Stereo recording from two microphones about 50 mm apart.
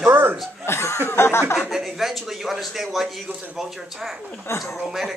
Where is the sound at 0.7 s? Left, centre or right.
Left.